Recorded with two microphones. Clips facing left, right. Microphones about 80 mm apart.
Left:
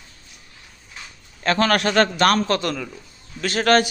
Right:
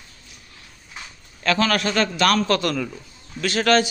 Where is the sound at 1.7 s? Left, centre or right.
Left.